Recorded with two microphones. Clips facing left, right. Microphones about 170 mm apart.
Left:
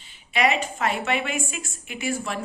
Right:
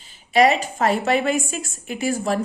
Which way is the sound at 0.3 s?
40° right (ahead or behind).